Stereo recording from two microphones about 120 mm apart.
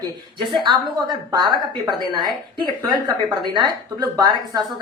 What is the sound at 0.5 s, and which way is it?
A woman's voice, 40° right (ahead or behind).